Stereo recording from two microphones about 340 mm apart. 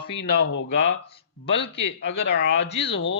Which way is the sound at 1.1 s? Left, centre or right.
Centre.